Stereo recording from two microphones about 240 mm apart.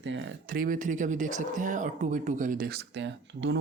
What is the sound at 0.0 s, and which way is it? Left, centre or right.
Speech, right.